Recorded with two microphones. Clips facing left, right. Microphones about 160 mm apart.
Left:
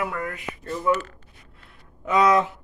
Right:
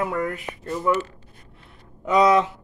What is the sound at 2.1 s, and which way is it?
Speech, 25° right (ahead or behind).